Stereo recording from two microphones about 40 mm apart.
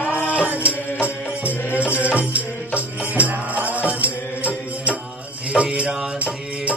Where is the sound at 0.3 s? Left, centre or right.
Right.